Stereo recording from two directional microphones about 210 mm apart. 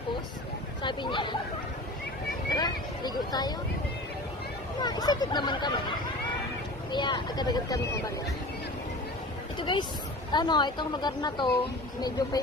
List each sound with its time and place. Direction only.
0.8 s a woman's voice: 20° left (ahead or behind)
2.5 s speech: 20° left (ahead or behind)
4.8 s a woman's voice: 20° left (ahead or behind)
6.9 s a woman's voice: 20° left (ahead or behind)
9.6 s a woman's voice: 25° left (ahead or behind)